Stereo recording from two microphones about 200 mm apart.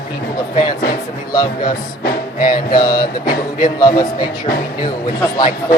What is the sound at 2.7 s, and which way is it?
A man's voice, 20° left (ahead or behind).